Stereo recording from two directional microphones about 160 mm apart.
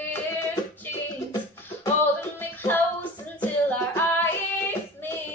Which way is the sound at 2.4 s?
15° left (ahead or behind).